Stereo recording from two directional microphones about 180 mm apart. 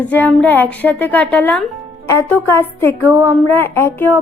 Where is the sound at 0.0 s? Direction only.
10° left (ahead or behind).